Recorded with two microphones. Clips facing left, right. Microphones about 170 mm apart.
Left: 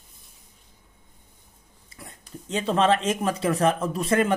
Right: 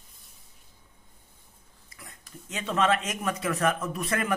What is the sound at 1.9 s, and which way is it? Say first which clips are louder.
Speech: left 6 dB; 30° left (ahead or behind).